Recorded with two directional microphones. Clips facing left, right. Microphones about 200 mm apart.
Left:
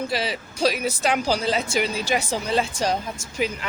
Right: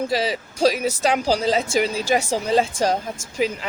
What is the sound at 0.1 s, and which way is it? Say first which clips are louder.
A woman's voice: right 4 dB; 40° right (ahead or behind).